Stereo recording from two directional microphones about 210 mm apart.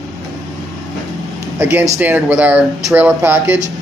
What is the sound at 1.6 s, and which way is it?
Speech, 10° right (ahead or behind).